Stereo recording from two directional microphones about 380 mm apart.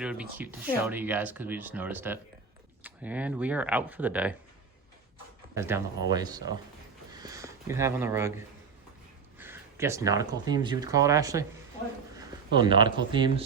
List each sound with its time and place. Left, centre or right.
0.0 s speech: centre
5.5 s speech: centre
9.4 s speech: centre